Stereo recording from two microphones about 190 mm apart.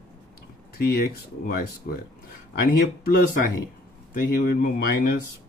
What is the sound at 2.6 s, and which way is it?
Speech, 50° left (ahead or behind).